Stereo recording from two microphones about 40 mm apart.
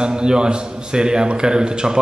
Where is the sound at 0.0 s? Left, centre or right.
Right.